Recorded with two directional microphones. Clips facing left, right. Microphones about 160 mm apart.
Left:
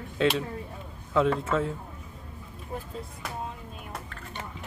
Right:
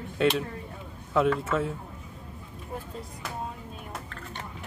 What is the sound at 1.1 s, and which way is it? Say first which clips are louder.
Speech: even; 5° right (ahead or behind).